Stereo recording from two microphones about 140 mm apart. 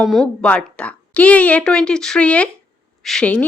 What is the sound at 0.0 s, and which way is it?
Speech, centre (ahead or behind).